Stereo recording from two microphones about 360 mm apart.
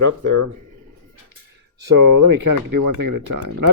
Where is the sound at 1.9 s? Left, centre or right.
Right.